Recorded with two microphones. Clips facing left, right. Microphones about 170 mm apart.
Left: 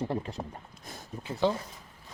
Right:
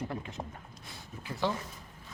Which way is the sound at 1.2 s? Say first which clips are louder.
Left 5 dB; 20° left (ahead or behind).